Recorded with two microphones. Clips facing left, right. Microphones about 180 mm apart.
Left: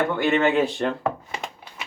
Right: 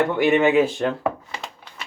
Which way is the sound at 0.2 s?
15° right (ahead or behind).